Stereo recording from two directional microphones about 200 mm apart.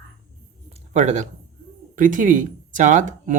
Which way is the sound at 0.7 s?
35° right (ahead or behind).